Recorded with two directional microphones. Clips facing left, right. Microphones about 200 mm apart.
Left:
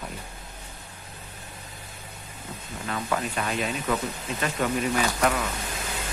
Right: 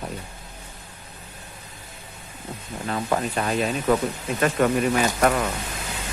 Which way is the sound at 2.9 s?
35° right (ahead or behind).